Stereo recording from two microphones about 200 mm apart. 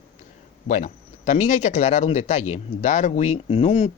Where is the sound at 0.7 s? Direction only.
40° left (ahead or behind).